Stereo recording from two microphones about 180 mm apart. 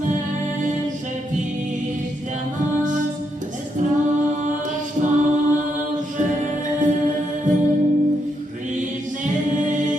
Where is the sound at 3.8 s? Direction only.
45° right (ahead or behind).